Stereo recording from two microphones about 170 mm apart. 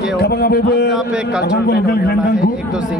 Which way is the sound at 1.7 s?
70° left (ahead or behind).